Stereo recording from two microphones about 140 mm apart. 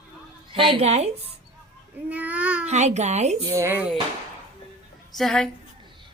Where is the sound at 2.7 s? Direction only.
55° right (ahead or behind).